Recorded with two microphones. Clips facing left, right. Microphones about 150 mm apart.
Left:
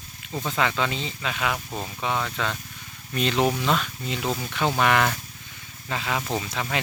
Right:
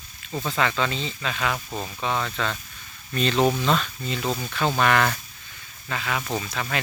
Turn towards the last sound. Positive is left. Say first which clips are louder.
# even
turn(degrees=20)  # may be behind; listen again after turning